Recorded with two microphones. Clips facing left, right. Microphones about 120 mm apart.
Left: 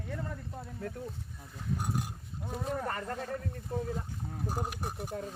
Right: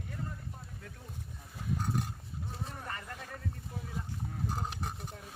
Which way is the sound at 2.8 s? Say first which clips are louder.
Left 8 dB; 40° left (ahead or behind).